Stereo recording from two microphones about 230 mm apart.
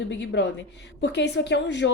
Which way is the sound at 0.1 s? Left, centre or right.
Left.